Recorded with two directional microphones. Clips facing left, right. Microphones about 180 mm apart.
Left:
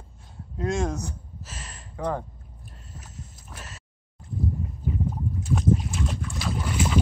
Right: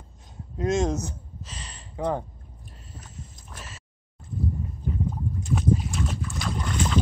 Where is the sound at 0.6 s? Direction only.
20° right (ahead or behind).